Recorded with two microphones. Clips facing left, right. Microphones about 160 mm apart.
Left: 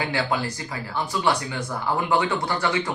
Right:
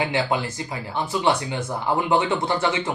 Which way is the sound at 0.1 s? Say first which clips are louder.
Right 2 dB; 20° right (ahead or behind).